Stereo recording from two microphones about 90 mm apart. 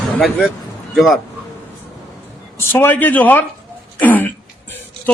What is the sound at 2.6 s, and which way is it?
Speech, 25° left (ahead or behind).